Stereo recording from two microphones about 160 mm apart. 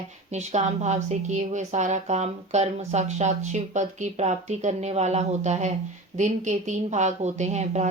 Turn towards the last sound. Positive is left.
turn(degrees=-45)  # may be behind; listen again after turning